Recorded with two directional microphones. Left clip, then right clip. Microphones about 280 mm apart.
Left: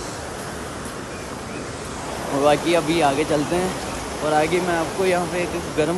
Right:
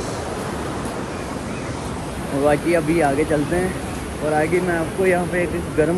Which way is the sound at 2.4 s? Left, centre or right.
Left.